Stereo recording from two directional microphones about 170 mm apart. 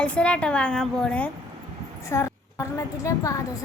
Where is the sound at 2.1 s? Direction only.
15° left (ahead or behind).